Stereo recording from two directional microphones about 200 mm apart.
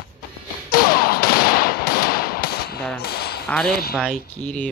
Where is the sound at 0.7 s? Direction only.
45° left (ahead or behind).